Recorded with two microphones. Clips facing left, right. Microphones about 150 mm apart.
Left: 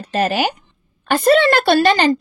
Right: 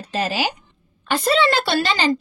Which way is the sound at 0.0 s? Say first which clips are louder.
Left 5 dB; 55° left (ahead or behind).